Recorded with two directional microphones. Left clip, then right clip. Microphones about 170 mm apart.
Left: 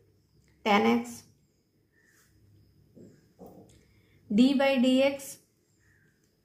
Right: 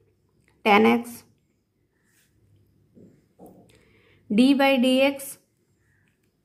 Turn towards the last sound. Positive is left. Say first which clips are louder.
# right 4 dB
turn(degrees=-35)  # may be behind; listen again after turning